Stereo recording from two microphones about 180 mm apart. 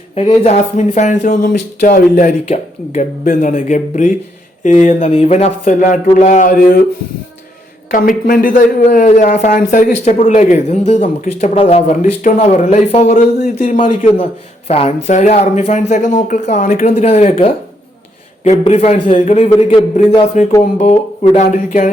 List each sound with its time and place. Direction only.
0.1 s speech: 35° left (ahead or behind); by 6.8 s 50° left (ahead or behind)
7.9 s speech: 50° left (ahead or behind)
18.6 s speech: 35° left (ahead or behind)
19.2 s speech: 40° left (ahead or behind)